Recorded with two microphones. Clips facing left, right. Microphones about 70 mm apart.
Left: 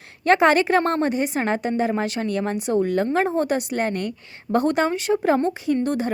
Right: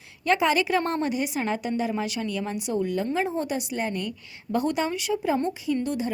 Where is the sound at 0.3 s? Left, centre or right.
Left.